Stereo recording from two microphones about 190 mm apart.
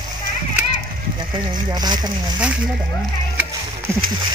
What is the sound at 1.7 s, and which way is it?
Speech, 20° right (ahead or behind).